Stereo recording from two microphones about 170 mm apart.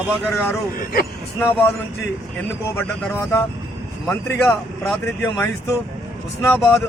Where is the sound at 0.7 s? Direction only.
55° left (ahead or behind).